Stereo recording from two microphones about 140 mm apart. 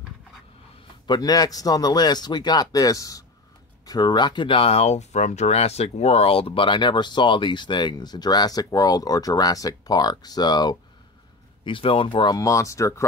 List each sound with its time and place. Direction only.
1.0 s speech: 30° left (ahead or behind)